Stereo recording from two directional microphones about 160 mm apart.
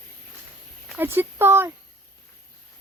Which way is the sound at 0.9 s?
15° right (ahead or behind).